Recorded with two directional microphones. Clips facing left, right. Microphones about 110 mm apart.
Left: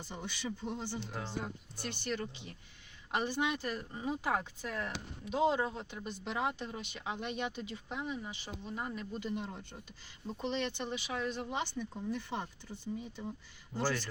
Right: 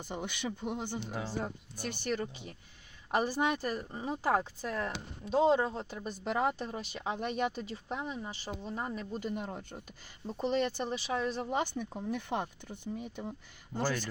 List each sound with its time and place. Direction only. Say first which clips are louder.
0.0 s speech: right 4 dB; 55° right (ahead or behind)
0.9 s speech: right 3 dB; 5° right (ahead or behind)
2.0 s speech: right 4 dB; 45° right (ahead or behind)
6.7 s speech: right 4 dB; 35° right (ahead or behind); by 13.2 s 55° right (ahead or behind)
13.7 s speech: right 1 dB; 5° left (ahead or behind)